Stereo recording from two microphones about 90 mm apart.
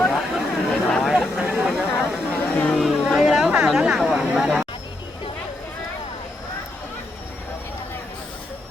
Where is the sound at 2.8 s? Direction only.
Centre (ahead or behind).